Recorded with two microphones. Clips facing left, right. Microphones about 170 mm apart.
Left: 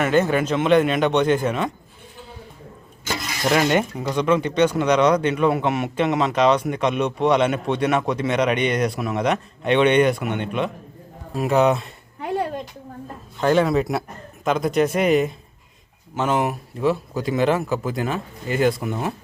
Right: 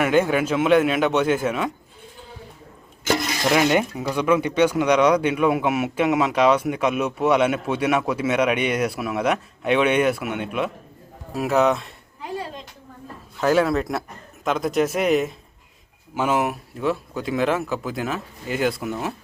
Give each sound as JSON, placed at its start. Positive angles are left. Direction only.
{"t": 0.0, "sound": "speech", "side_deg": -10}
{"t": 3.5, "sound": "speech", "side_deg": -5}
{"t": 12.2, "sound": "a sound", "side_deg": 60}
{"t": 13.4, "sound": "speech", "side_deg": -5}